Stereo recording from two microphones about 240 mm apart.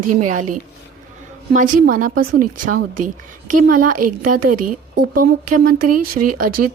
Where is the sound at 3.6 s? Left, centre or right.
Right.